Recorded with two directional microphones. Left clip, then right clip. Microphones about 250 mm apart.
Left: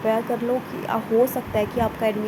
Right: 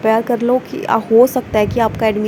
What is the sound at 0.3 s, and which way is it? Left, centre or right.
Speech, right.